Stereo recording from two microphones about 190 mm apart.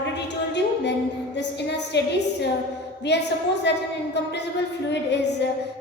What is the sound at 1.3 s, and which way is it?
A woman's voice, 65° left (ahead or behind).